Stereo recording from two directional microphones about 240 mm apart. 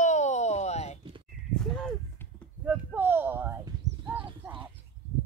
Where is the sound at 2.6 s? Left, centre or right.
Centre.